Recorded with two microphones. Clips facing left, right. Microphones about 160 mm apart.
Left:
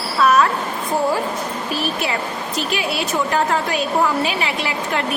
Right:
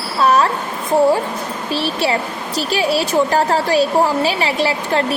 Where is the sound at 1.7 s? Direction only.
30° right (ahead or behind).